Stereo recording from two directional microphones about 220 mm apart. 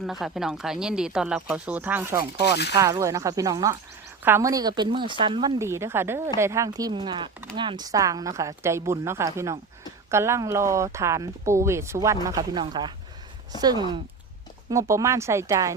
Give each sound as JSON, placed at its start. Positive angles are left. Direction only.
{"t": 0.0, "sound": "speech", "side_deg": 0}
{"t": 2.3, "sound": "speech", "side_deg": 50}
{"t": 2.7, "sound": "speech", "side_deg": -15}